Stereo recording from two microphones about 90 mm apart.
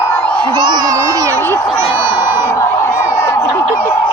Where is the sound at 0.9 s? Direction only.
35° right (ahead or behind).